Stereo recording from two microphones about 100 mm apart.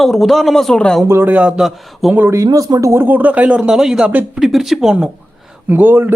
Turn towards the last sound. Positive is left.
turn(degrees=-20)  # may be behind; listen again after turning